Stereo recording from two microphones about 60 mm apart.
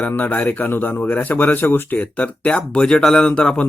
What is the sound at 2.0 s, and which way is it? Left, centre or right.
Speech, left.